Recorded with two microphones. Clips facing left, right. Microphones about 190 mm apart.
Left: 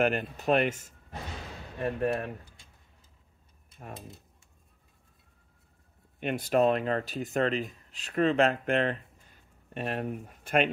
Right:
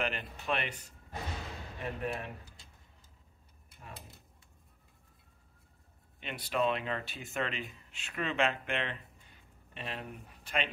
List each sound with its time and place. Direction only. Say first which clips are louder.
0.0 s speech: left 9 dB; 45° left (ahead or behind)
6.1 s speech: left 8 dB; 50° left (ahead or behind)